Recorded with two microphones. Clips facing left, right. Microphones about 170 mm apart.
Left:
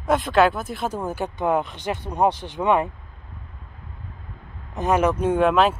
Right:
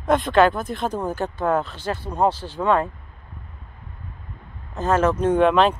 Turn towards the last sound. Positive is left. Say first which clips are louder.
# right 1 dB
turn(degrees=5)  # may be behind; listen again after turning